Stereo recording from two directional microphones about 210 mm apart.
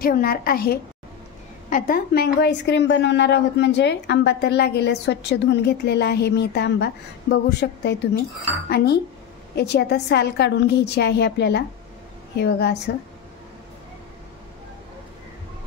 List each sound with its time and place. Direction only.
0.0 s a woman's voice: 45° left (ahead or behind)